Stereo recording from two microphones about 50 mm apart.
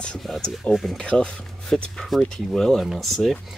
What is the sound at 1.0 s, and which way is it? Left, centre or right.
Speech, centre.